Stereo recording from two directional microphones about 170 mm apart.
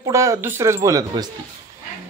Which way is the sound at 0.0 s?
20° right (ahead or behind).